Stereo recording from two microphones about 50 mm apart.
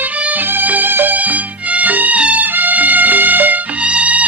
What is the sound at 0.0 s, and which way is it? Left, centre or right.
Music, right.